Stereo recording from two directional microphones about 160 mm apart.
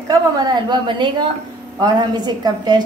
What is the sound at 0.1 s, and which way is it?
A woman's voice, 25° right (ahead or behind).